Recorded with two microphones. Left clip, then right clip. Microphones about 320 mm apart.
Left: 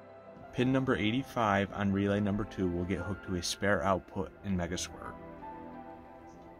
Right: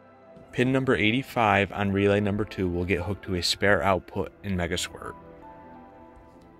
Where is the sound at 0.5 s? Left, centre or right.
Centre.